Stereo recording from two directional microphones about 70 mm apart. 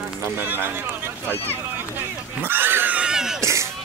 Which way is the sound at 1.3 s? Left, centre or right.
Left.